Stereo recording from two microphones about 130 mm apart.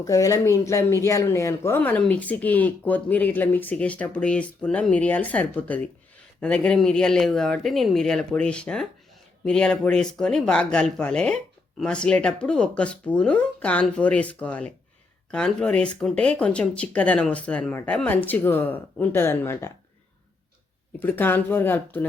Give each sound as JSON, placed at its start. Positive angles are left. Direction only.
{"t": 0.0, "sound": "speech", "side_deg": 25}
{"t": 21.0, "sound": "speech", "side_deg": 15}